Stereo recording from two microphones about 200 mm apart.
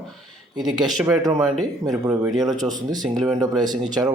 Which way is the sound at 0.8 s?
5° right (ahead or behind).